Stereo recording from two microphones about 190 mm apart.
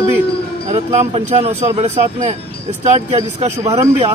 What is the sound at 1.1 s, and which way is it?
A man's voice, 35° right (ahead or behind).